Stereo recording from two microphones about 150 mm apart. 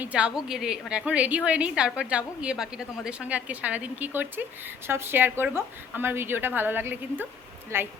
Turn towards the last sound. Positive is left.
turn(degrees=-15)  # may be behind; listen again after turning